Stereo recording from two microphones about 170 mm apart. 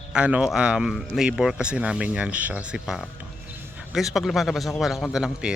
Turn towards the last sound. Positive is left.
turn(degrees=-5)  # may be behind; listen again after turning